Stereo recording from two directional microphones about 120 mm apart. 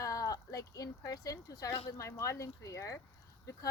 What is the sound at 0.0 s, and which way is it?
Speech, 30° left (ahead or behind).